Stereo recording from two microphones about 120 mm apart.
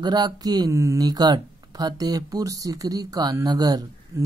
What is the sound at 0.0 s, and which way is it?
Speech, 35° right (ahead or behind).